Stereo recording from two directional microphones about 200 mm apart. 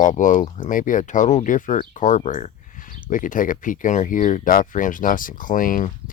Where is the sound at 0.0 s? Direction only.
40° left (ahead or behind).